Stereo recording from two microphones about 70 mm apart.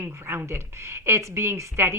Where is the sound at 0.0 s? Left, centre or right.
Right.